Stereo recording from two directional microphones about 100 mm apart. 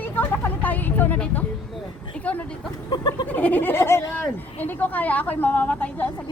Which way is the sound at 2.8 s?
45° left (ahead or behind).